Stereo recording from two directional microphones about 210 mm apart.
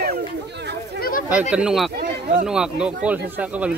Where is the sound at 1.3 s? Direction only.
5° right (ahead or behind).